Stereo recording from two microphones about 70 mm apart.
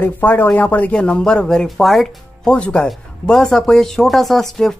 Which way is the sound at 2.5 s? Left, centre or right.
Centre.